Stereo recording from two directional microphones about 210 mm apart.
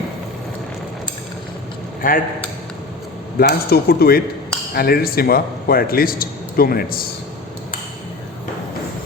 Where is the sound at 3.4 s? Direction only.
45° left (ahead or behind).